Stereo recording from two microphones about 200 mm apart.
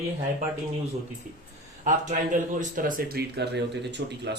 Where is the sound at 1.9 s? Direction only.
40° right (ahead or behind); by 4.1 s 60° right (ahead or behind).